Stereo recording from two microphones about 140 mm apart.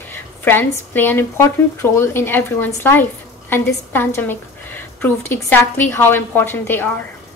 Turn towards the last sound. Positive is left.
turn(degrees=15)  # may be behind; listen again after turning